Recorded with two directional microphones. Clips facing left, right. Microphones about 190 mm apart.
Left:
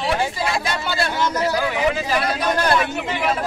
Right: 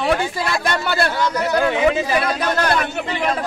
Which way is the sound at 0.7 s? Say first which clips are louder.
Right 3 dB; 60° right (ahead or behind).